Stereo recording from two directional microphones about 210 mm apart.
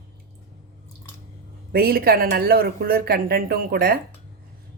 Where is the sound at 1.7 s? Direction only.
45° right (ahead or behind).